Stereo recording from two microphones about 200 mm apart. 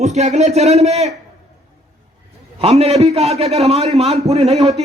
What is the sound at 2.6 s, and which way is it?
A man's voice, 30° right (ahead or behind).